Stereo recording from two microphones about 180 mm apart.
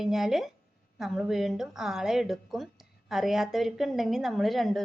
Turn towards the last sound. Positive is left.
turn(degrees=0)  # may be behind; listen again after turning